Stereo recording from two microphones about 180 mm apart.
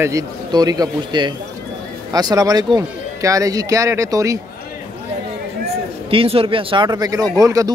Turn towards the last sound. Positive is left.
turn(degrees=-20)  # may be behind; listen again after turning